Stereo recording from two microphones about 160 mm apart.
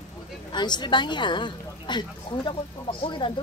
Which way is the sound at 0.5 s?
25° left (ahead or behind).